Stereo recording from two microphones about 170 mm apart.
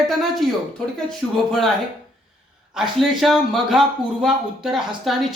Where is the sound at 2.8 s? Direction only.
Centre (ahead or behind).